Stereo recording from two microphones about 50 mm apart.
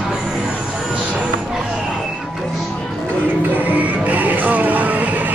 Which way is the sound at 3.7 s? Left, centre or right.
Right.